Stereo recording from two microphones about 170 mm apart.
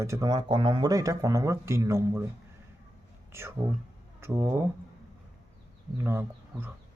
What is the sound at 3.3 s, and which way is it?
Speech, 15° right (ahead or behind).